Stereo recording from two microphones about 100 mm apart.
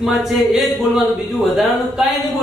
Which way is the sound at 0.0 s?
5° right (ahead or behind).